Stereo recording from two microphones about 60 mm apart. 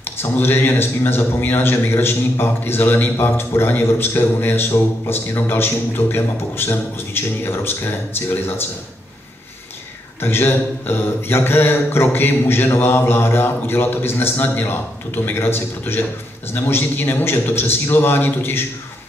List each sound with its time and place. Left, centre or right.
0.0 s speech: left
10.2 s speech: left